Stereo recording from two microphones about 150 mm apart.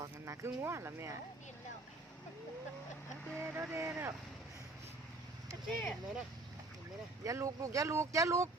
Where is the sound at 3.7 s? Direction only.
15° right (ahead or behind).